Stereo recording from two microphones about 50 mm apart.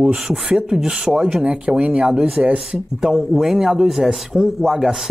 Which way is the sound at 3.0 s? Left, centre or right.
Centre.